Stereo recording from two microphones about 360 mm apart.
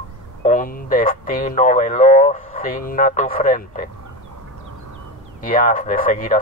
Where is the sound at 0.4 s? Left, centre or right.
Left.